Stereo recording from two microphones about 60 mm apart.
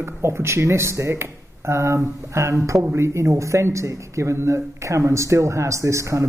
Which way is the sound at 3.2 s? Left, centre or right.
Right.